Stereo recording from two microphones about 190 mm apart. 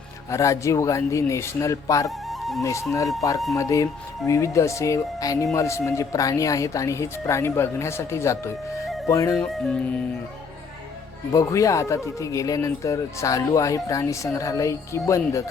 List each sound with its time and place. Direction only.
0.3 s speech: 15° left (ahead or behind)
2.0 s music: centre (ahead or behind)
3.5 s speech: 15° left (ahead or behind)
9.4 s music: 5° left (ahead or behind)
11.3 s speech: 15° left (ahead or behind)